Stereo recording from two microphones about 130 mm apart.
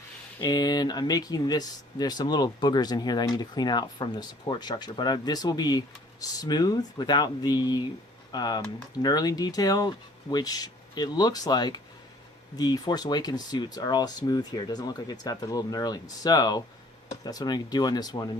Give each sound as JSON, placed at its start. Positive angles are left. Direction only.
{"t": 0.3, "sound": "speech", "side_deg": 30}